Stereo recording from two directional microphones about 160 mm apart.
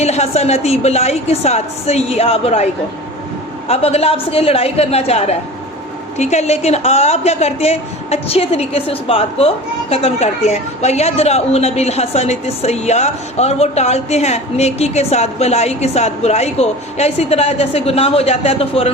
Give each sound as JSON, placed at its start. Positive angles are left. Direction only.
{"t": 0.0, "sound": "a woman's voice", "side_deg": 40}
{"t": 3.7, "sound": "a woman's voice", "side_deg": 40}